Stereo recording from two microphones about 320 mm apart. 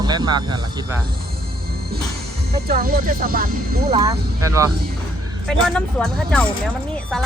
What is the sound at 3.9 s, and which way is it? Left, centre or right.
Speech, centre.